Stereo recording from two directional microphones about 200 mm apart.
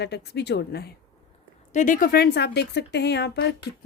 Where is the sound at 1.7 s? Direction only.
40° left (ahead or behind); by 3.5 s 55° left (ahead or behind).